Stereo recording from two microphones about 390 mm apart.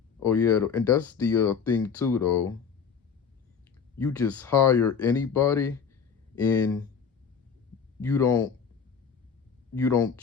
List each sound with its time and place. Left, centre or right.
0.2 s speech: centre
3.9 s speech: centre
8.0 s speech: centre
9.7 s speech: centre